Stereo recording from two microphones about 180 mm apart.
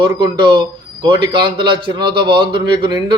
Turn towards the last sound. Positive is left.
turn(degrees=-25)  # may be behind; listen again after turning